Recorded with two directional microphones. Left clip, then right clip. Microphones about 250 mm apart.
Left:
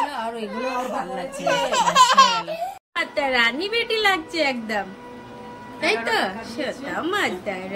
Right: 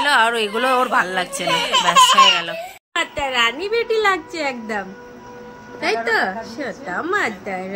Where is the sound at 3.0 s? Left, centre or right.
Right.